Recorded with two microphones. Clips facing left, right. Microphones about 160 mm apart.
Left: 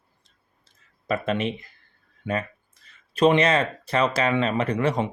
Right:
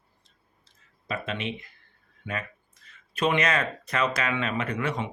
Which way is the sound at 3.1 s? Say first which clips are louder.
Left 6 dB; 35° left (ahead or behind).